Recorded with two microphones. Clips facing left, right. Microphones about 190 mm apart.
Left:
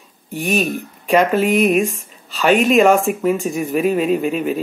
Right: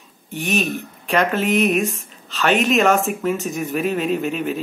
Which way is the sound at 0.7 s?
15° left (ahead or behind).